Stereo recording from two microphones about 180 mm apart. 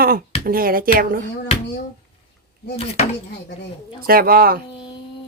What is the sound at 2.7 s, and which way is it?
Speech, 35° left (ahead or behind).